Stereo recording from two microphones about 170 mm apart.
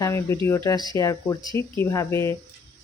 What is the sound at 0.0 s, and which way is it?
Speech, 15° left (ahead or behind).